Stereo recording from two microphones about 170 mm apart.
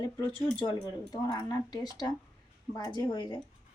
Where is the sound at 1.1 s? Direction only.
25° left (ahead or behind).